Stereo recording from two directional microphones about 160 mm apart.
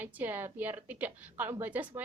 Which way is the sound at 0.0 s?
10° right (ahead or behind).